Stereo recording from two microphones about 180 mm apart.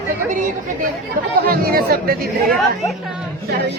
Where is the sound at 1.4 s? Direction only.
55° right (ahead or behind).